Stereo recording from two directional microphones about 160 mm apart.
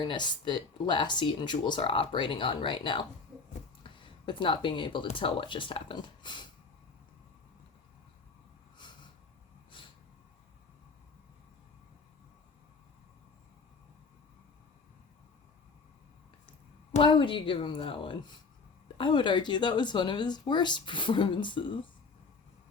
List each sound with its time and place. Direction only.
0.0 s a woman's voice: 30° left (ahead or behind)
17.0 s a woman's voice: 30° left (ahead or behind)